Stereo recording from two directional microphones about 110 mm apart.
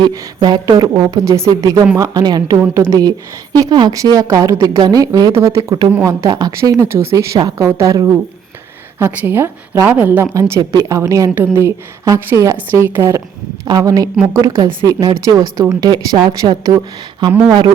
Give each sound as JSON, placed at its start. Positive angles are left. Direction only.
{"t": 0.0, "sound": "a woman's voice", "side_deg": -40}
{"t": 6.6, "sound": "a woman's voice", "side_deg": -25}
{"t": 13.7, "sound": "a woman's voice", "side_deg": -35}